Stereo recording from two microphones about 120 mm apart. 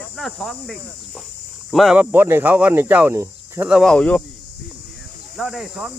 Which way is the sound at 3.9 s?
5° left (ahead or behind).